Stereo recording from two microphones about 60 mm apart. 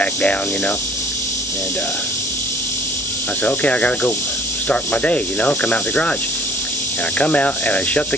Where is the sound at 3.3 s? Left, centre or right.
Left.